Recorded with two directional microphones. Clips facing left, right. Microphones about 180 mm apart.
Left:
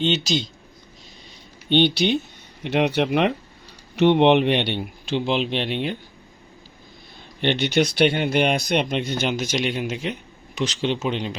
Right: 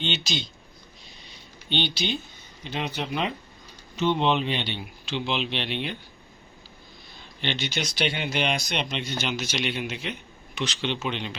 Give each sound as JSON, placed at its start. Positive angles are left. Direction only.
{"t": 0.0, "sound": "speech", "side_deg": 40}
{"t": 1.7, "sound": "speech", "side_deg": 60}
{"t": 7.4, "sound": "speech", "side_deg": 60}